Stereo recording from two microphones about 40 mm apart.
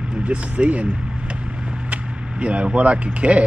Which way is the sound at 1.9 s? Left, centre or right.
Right.